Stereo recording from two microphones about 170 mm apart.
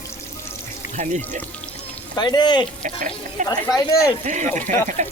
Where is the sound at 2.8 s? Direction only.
50° right (ahead or behind).